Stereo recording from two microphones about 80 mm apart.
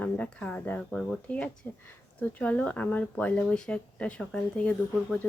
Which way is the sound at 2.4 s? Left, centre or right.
Centre.